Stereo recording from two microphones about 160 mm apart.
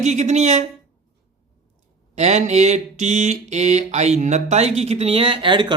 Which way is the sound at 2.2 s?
45° right (ahead or behind).